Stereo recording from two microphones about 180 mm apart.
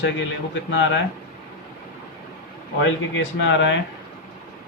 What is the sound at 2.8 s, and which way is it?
Speech, 90° left.